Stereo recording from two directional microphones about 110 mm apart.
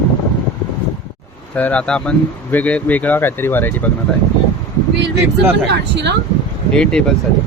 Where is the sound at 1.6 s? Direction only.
10° left (ahead or behind).